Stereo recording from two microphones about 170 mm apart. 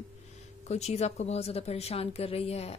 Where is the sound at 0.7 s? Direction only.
40° left (ahead or behind).